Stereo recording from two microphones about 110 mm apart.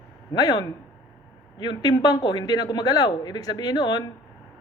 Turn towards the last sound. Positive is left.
turn(degrees=40)  # may be behind; listen again after turning